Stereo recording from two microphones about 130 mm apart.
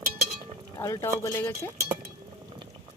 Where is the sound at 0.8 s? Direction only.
25° left (ahead or behind).